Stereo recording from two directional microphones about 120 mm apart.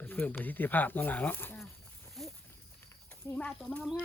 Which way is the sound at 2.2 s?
Centre (ahead or behind).